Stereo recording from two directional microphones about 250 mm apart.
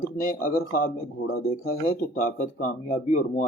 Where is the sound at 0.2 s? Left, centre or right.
Left.